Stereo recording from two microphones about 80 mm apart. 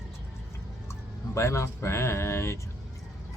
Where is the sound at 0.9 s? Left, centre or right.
Left.